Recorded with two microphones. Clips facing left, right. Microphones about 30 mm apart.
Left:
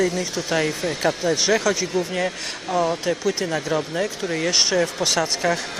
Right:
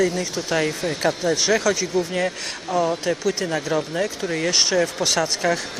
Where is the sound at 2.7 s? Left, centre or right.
Left.